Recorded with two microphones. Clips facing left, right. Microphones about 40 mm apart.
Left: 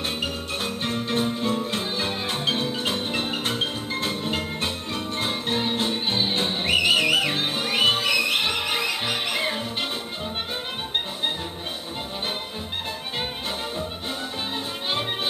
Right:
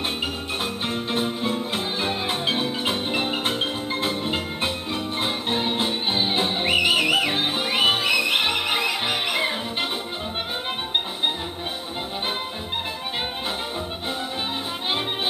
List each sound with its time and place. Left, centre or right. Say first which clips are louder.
0.8 s music: left 1 dB; centre